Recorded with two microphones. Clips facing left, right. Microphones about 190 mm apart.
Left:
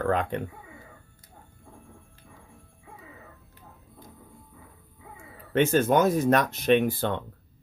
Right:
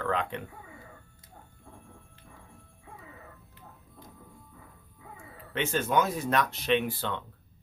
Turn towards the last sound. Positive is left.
turn(degrees=50)  # may be behind; listen again after turning